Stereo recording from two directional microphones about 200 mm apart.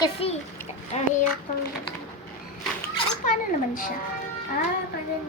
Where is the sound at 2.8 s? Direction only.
45° left (ahead or behind).